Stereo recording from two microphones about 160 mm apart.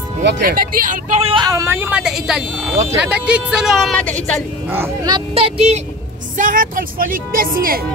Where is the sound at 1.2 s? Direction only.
30° right (ahead or behind); by 2.7 s 5° right (ahead or behind).